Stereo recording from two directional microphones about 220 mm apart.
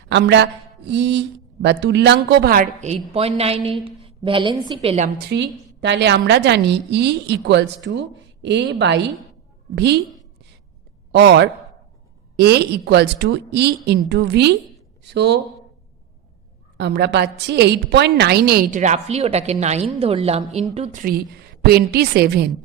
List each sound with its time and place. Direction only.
0.1 s a woman's voice: 50° right (ahead or behind); by 5.1 s 30° right (ahead or behind)
5.3 s a woman's voice: 50° right (ahead or behind)
11.1 s a woman's voice: 50° right (ahead or behind)
16.7 s a woman's voice: 50° right (ahead or behind)